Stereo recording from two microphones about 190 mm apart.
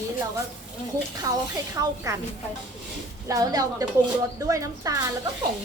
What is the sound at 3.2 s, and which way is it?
A woman's voice, 20° right (ahead or behind).